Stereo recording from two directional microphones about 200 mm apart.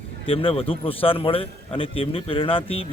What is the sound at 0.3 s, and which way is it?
A man's voice, 25° left (ahead or behind).